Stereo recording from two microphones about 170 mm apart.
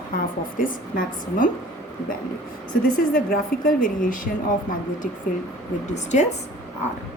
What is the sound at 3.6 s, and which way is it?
Speech, 50° left (ahead or behind).